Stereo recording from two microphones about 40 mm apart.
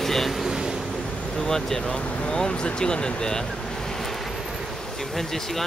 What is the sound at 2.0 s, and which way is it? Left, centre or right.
Speech, left.